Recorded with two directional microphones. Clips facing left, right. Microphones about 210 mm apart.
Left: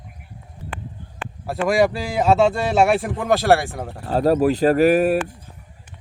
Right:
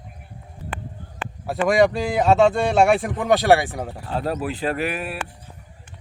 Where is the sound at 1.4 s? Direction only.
Centre (ahead or behind).